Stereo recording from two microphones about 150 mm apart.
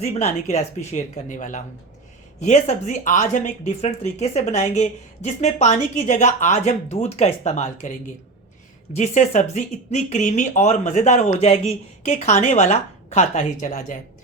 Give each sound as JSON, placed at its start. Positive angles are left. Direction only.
{"t": 0.0, "sound": "speech", "side_deg": 45}